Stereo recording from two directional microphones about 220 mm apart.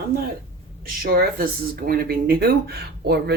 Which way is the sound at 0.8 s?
40° right (ahead or behind).